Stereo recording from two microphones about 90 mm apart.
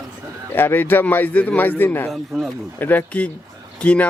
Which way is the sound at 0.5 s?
20° left (ahead or behind).